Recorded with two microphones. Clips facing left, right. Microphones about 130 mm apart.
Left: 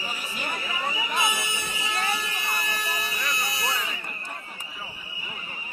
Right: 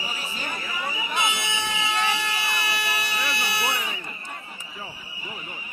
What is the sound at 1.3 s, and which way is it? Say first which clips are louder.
Air horn: right 4 dB; 85° right.